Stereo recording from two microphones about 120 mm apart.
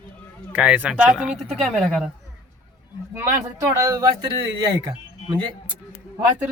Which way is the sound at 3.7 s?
25° right (ahead or behind).